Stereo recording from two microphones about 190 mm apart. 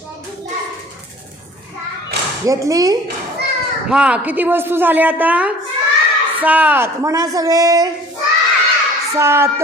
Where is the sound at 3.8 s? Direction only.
5° right (ahead or behind).